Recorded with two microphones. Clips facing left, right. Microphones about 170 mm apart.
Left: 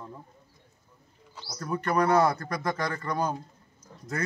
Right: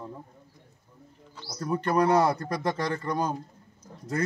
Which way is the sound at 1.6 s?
30° right (ahead or behind).